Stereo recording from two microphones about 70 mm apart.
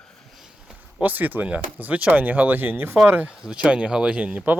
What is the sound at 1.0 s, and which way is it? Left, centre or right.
Speech, right.